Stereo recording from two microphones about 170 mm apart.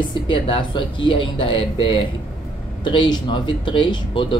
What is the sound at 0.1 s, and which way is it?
Speech, 30° left (ahead or behind).